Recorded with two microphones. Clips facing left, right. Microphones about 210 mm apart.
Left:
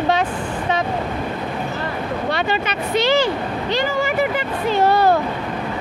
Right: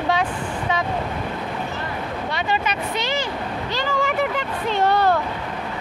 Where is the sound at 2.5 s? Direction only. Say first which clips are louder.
Left 3 dB; 30° left (ahead or behind).